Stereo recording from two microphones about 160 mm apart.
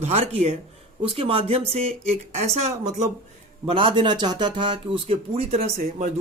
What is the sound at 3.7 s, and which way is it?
Speech, 35° right (ahead or behind).